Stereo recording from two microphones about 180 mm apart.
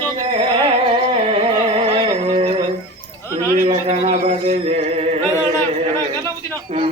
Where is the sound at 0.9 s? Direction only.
30° right (ahead or behind).